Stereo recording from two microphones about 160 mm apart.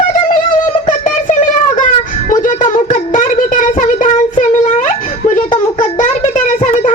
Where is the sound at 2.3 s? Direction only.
55° left (ahead or behind).